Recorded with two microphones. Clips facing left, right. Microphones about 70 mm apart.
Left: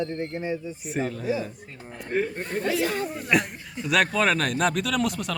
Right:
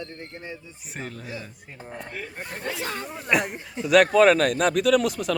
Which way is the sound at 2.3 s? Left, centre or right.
Centre.